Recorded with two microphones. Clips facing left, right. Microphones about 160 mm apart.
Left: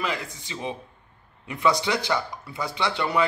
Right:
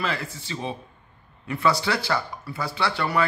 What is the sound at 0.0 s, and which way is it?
Speech, 15° left (ahead or behind).